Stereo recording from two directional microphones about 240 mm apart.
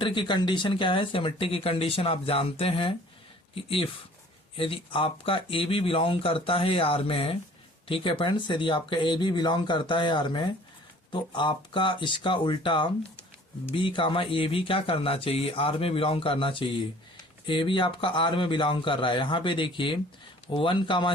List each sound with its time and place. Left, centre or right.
0.0 s speech: left